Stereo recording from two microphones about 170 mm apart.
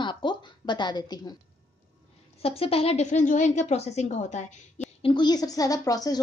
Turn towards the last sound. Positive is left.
turn(degrees=20)  # may be behind; listen again after turning